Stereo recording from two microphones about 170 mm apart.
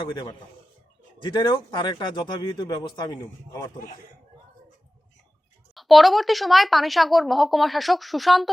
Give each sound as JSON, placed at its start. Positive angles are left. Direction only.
{"t": 0.0, "sound": "speech", "side_deg": 25}
{"t": 5.7, "sound": "speech", "side_deg": 0}